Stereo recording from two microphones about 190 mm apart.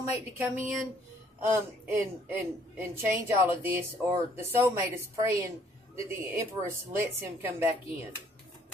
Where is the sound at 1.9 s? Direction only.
10° right (ahead or behind).